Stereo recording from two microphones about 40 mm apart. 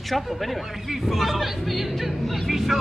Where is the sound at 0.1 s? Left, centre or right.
Centre.